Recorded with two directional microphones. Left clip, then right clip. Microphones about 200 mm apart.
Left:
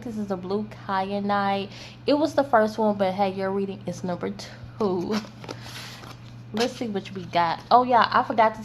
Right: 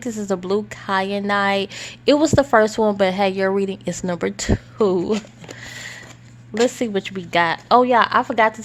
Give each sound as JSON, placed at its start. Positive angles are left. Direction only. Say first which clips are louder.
{"t": 0.0, "sound": "a woman's voice", "louder": "right 7 dB", "side_deg": -45}
{"t": 6.6, "sound": "a woman's voice", "louder": "right 8 dB", "side_deg": -45}